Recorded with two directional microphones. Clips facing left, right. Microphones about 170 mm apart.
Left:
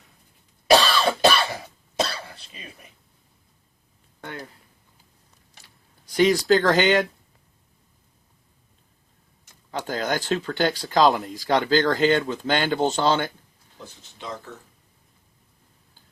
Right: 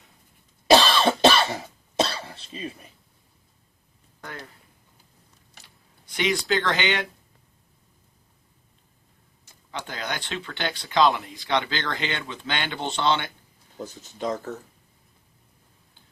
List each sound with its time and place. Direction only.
0.9 s cough: 25° right (ahead or behind)
4.2 s a sound: 30° left (ahead or behind)
6.1 s speech: 40° left (ahead or behind)
9.7 s speech: 40° left (ahead or behind)
13.7 s speech: 40° right (ahead or behind)